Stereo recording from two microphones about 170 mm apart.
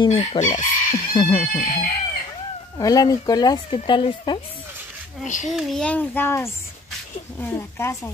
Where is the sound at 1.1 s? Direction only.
25° left (ahead or behind).